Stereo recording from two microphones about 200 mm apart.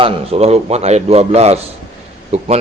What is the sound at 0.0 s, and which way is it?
A man's voice, 30° right (ahead or behind).